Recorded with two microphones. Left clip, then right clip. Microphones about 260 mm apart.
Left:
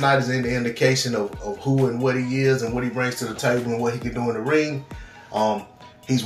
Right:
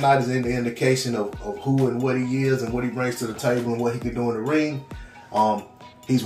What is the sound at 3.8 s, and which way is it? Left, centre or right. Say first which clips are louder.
Speech: even; centre.